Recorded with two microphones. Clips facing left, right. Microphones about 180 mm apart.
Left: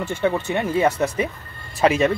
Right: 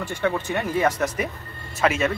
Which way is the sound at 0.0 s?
25° left (ahead or behind).